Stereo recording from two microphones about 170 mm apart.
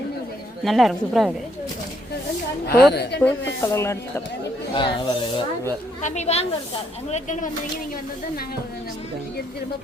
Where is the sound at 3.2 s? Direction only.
10° left (ahead or behind).